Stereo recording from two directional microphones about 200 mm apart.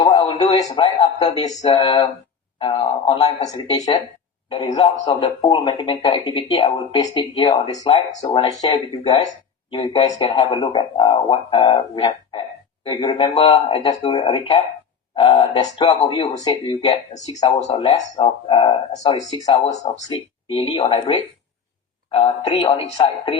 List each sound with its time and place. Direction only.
0.0 s a man's voice: 25° left (ahead or behind)
3.4 s a man's voice: 20° left (ahead or behind)
17.2 s a man's voice: 35° left (ahead or behind)
17.7 s speech: 25° left (ahead or behind)
19.6 s a man's voice: 35° left (ahead or behind)